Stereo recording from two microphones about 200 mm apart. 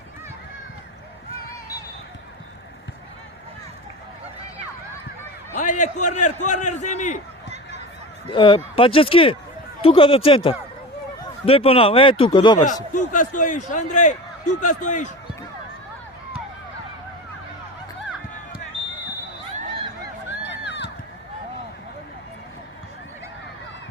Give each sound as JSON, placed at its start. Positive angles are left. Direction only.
{"t": 5.5, "sound": "a man's voice", "side_deg": 35}
{"t": 8.3, "sound": "speech", "side_deg": 25}
{"t": 12.5, "sound": "a man's voice", "side_deg": 40}
{"t": 20.4, "sound": "a sound", "side_deg": 60}